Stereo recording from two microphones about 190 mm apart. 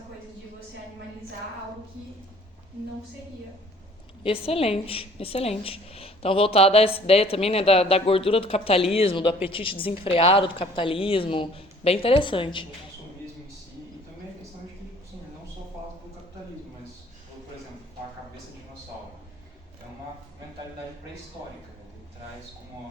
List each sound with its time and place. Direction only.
4.2 s a woman's voice: 30° left (ahead or behind)